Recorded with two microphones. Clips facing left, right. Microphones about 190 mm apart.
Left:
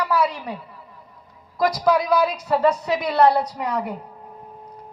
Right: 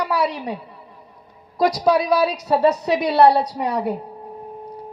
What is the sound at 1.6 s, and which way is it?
Speech, 35° right (ahead or behind).